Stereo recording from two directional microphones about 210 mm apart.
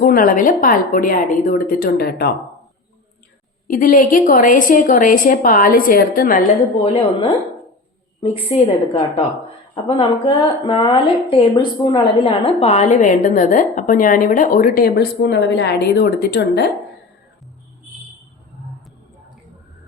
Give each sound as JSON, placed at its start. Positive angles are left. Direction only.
{"t": 0.0, "sound": "a woman's voice", "side_deg": 45}
{"t": 3.7, "sound": "a woman's voice", "side_deg": 40}
{"t": 6.8, "sound": "a woman's voice", "side_deg": 30}